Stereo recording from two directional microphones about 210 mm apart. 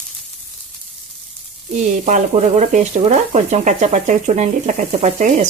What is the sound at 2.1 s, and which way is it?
Speech, 35° right (ahead or behind).